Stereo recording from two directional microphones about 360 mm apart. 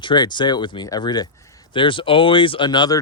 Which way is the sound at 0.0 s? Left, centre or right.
Centre.